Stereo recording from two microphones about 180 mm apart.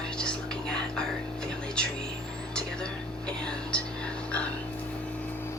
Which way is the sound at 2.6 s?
5° left (ahead or behind).